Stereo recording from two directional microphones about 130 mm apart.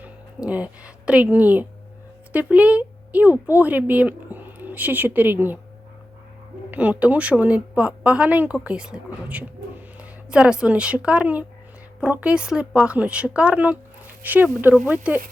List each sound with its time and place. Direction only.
0.0 s speech: 10° right (ahead or behind)
6.7 s speech: 10° right (ahead or behind)